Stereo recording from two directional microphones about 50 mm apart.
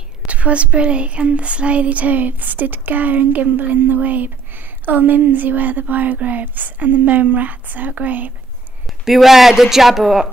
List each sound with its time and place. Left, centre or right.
0.3 s speech: right
9.0 s speech: centre